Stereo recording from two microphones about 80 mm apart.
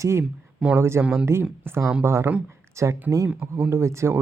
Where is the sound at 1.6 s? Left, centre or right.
Right.